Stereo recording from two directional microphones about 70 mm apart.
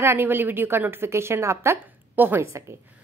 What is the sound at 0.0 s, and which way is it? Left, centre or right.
A woman's voice, right.